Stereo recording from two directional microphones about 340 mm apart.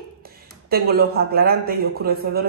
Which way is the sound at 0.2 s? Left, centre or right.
Right.